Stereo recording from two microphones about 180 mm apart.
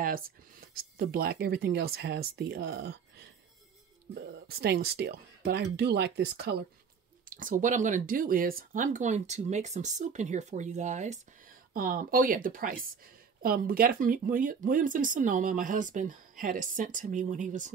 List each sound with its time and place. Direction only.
0.0 s speech: 55° right (ahead or behind)
7.2 s speech: 50° right (ahead or behind)